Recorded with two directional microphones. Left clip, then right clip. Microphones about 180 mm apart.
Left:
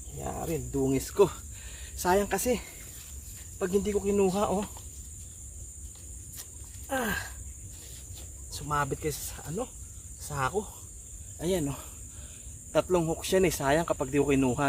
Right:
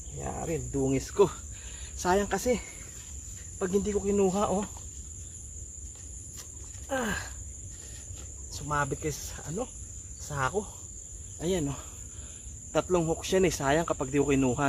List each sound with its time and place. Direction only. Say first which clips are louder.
0.2 s speech: even; 30° left (ahead or behind)
6.8 s a sound: left 1 dB; 25° left (ahead or behind)
8.5 s speech: even; 25° left (ahead or behind)